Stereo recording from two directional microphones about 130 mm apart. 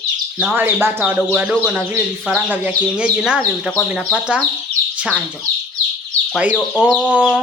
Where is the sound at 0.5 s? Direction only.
15° right (ahead or behind).